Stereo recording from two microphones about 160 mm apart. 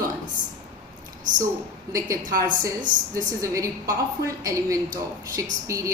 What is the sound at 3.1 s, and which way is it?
A woman's voice, 20° right (ahead or behind).